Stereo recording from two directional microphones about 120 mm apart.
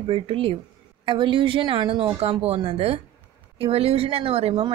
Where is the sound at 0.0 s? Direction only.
50° right (ahead or behind).